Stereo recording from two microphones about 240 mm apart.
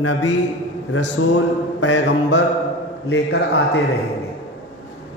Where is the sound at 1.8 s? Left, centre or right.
Left.